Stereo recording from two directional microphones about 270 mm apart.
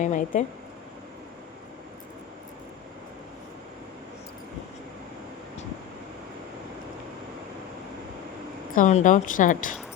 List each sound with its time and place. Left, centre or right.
0.0 s a woman's voice: left
8.7 s a woman's voice: left